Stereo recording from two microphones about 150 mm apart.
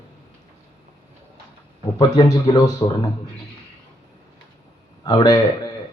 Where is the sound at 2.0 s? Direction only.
25° left (ahead or behind).